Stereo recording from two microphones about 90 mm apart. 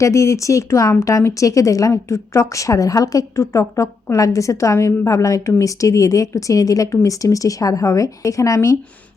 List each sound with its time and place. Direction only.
0.0 s speech: 35° left (ahead or behind)